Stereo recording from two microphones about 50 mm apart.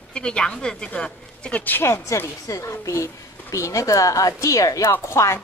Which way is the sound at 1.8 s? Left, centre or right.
Left.